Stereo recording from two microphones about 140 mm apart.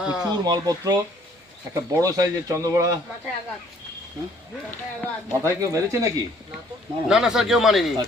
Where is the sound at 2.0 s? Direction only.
25° right (ahead or behind).